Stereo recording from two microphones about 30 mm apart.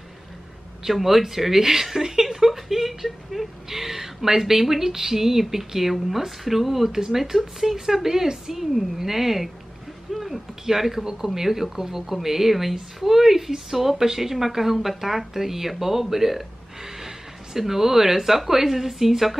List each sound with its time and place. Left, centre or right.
0.8 s a woman's voice: centre